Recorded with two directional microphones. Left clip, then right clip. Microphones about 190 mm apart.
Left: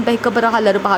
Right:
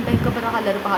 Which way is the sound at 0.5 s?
35° left (ahead or behind).